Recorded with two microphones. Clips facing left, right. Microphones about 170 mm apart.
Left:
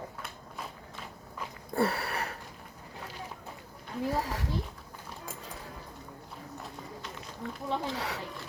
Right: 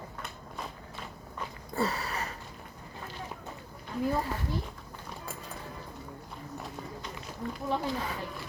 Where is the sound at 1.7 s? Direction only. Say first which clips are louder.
Left 2 dB; 60° left (ahead or behind).